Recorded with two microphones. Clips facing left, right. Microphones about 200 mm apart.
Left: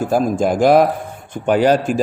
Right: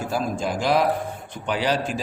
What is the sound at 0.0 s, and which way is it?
A man's voice, 50° left (ahead or behind).